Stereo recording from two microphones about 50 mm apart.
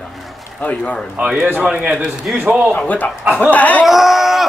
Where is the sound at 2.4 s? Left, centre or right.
Right.